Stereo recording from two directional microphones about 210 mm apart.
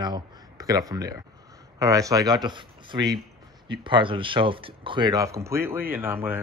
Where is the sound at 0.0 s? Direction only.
20° right (ahead or behind).